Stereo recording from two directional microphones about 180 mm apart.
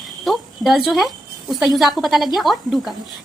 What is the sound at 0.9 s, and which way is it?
A woman's voice, centre (ahead or behind).